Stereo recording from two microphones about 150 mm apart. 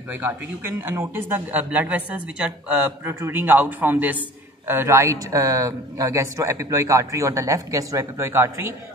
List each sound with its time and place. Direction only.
0.1 s a man's voice: 15° right (ahead or behind)